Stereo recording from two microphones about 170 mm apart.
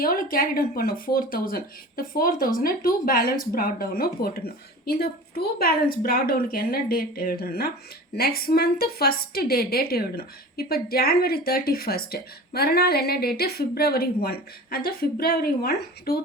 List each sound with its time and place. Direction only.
0.0 s a woman's voice: 55° left (ahead or behind)